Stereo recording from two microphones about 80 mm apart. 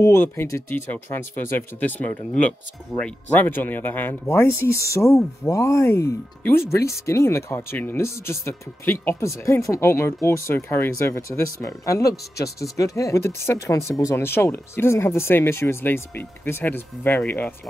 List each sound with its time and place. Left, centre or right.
0.0 s speech: left; by 2.5 s centre
3.3 s speech: left
9.2 s speech: left
13.2 s speech: left